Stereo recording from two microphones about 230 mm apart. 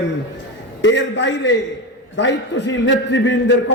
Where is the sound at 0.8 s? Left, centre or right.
Left.